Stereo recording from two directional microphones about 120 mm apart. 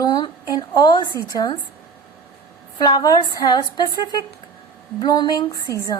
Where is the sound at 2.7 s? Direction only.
35° left (ahead or behind).